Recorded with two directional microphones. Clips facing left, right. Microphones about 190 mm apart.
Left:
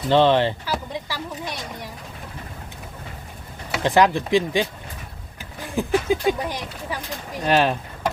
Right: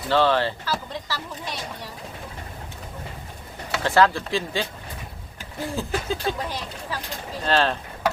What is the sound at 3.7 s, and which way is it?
Speech, 15° left (ahead or behind).